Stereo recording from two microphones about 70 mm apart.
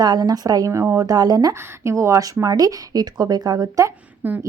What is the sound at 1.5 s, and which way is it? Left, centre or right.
Speech, right.